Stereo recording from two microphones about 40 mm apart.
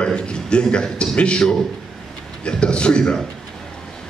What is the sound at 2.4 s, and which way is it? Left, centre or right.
Speech, left.